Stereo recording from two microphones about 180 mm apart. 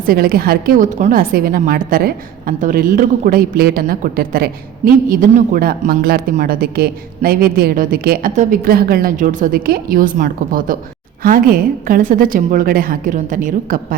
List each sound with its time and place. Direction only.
0.0 s a woman's voice: 55° right (ahead or behind)